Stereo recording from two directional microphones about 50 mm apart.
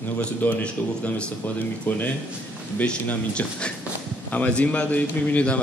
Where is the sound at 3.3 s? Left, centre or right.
Left.